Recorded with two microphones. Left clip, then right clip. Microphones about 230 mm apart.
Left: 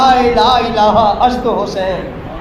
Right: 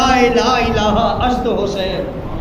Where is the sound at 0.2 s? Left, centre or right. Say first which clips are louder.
Left 3 dB; centre.